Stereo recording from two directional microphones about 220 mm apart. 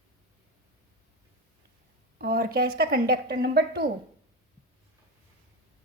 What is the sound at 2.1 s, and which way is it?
A woman's voice, 45° right (ahead or behind).